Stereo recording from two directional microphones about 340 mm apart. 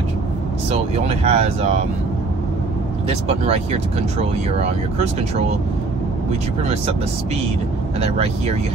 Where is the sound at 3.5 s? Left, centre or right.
Centre.